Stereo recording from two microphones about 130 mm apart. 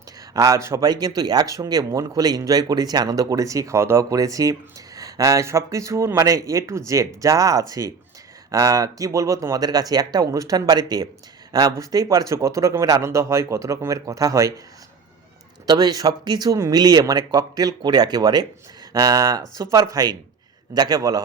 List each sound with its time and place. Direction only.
0.3 s speech: 25° right (ahead or behind)
15.6 s speech: 30° right (ahead or behind)